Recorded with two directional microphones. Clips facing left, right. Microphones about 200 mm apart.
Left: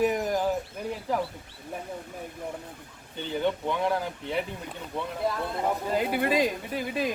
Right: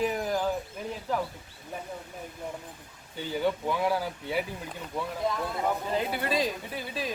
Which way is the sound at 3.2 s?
5° right (ahead or behind).